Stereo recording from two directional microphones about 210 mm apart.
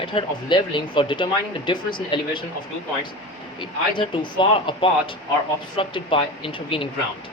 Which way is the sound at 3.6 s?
25° left (ahead or behind).